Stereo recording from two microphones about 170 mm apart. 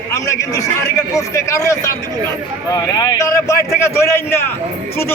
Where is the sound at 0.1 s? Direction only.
20° left (ahead or behind).